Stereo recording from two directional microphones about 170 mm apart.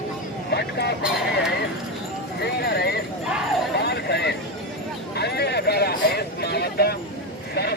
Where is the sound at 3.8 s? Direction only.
80° left.